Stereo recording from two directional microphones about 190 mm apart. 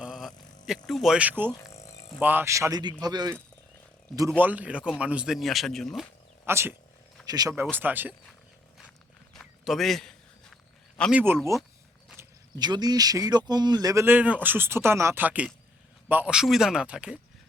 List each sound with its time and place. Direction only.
0.0 s a sound: centre (ahead or behind)
0.9 s speech: centre (ahead or behind)
1.7 s music: 15° left (ahead or behind)
2.2 s speech: 10° right (ahead or behind)
4.4 s speech: 10° right (ahead or behind)
6.4 s speech: 15° right (ahead or behind)
9.3 s a sound: centre (ahead or behind)
11.1 s speech: 10° right (ahead or behind)
12.1 s speech: 20° right (ahead or behind); by 17.2 s 5° right (ahead or behind)